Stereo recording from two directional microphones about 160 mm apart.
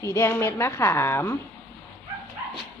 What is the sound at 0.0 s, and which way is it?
Speech, 15° left (ahead or behind).